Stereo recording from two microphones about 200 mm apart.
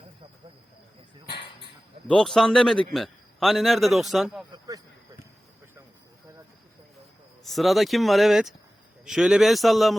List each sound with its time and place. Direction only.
2.0 s a man's voice: 5° left (ahead or behind)
4.5 s a sound: 20° right (ahead or behind)
7.4 s a man's voice: centre (ahead or behind)